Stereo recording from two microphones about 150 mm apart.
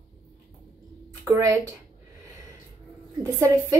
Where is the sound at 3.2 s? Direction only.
25° right (ahead or behind).